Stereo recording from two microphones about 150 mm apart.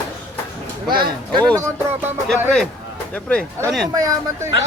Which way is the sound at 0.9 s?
30° right (ahead or behind).